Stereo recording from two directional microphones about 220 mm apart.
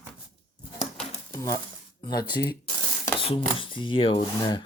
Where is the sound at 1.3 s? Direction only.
15° left (ahead or behind).